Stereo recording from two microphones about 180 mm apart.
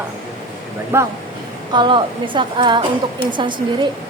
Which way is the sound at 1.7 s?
25° right (ahead or behind).